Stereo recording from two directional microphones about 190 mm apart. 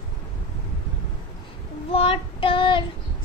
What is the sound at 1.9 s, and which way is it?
Child singing, 30° left (ahead or behind).